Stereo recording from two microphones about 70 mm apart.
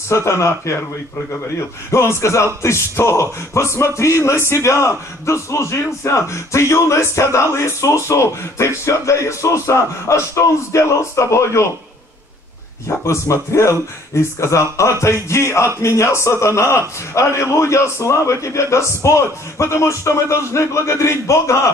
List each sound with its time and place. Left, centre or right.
0.1 s speech: left
1.9 s speech: left
13.0 s speech: left